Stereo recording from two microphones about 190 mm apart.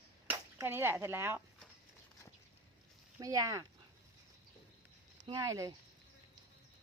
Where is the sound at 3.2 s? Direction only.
20° right (ahead or behind).